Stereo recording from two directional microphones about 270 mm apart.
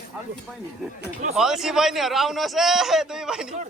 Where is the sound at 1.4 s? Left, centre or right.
Centre.